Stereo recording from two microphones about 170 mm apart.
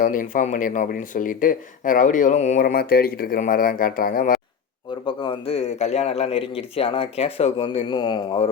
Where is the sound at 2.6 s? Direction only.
60° left (ahead or behind).